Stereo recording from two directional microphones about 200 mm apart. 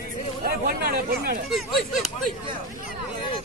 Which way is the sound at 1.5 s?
Centre (ahead or behind).